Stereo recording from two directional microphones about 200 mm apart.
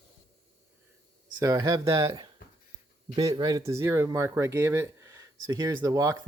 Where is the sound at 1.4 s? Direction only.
20° right (ahead or behind).